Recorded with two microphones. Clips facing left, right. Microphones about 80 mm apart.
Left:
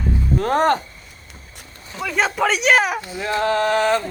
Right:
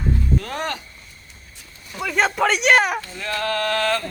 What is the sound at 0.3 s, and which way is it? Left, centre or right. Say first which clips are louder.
Speech: left 9 dB; left.